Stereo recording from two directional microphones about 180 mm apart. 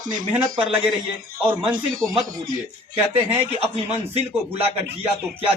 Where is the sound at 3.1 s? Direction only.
35° right (ahead or behind).